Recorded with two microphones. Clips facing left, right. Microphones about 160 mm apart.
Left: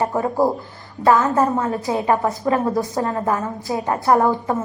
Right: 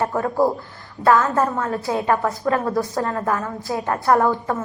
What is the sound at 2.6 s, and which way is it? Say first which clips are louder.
Speech: left 1 dB; 20° left (ahead or behind).